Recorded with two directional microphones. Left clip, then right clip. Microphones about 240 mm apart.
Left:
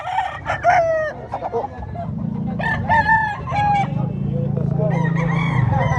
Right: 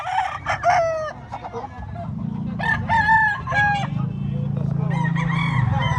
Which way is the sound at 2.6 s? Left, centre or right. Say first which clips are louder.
Left 2 dB; right.